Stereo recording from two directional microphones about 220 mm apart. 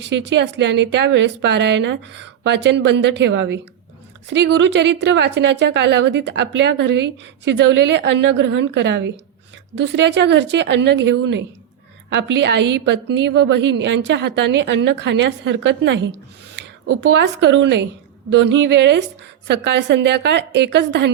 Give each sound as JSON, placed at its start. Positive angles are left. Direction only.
{"t": 0.0, "sound": "a woman's voice", "side_deg": -55}